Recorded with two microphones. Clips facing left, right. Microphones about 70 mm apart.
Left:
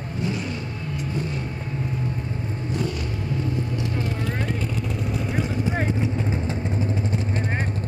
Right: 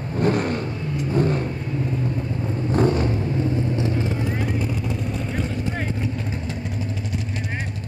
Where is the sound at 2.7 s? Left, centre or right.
Right.